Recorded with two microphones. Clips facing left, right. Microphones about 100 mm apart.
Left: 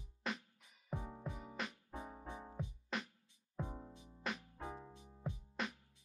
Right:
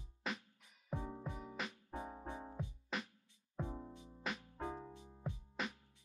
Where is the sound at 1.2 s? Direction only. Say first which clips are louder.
Even; centre (ahead or behind).